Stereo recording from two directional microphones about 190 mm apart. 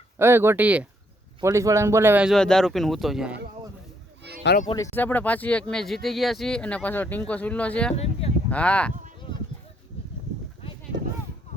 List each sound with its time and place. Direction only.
0.2 s speech: 10° right (ahead or behind)
4.2 s a sound: 60° right (ahead or behind)
4.7 s speech: 15° left (ahead or behind)
7.9 s speech: 30° left (ahead or behind)
8.4 s speech: 5° left (ahead or behind)